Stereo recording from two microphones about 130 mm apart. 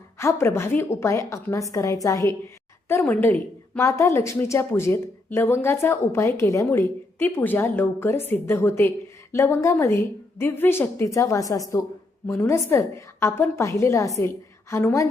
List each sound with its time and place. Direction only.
0.2 s a woman's voice: 20° left (ahead or behind)
2.9 s a woman's voice: 15° left (ahead or behind)